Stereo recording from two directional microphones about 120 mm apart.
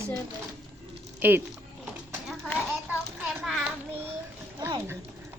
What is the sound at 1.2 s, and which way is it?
Speech, 15° right (ahead or behind).